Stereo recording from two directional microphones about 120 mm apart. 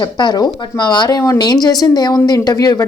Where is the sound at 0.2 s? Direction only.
35° left (ahead or behind).